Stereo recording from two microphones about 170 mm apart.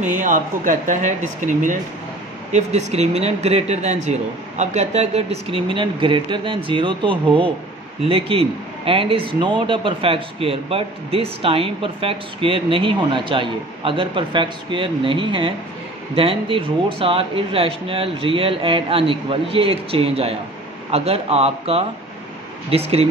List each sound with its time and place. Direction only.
0.0 s speech: 45° right (ahead or behind)